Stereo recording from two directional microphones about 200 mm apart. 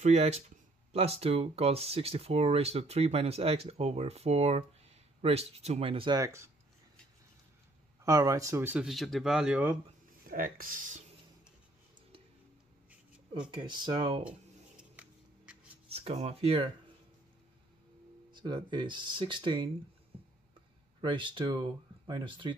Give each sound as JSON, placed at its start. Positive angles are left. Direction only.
{"t": 0.0, "sound": "speech", "side_deg": -35}
{"t": 8.0, "sound": "speech", "side_deg": -15}
{"t": 10.2, "sound": "speech", "side_deg": -45}
{"t": 13.6, "sound": "speech", "side_deg": -20}
{"t": 14.8, "sound": "a sound", "side_deg": -5}
{"t": 15.9, "sound": "speech", "side_deg": -30}
{"t": 18.3, "sound": "speech", "side_deg": -20}
{"t": 21.0, "sound": "speech", "side_deg": -25}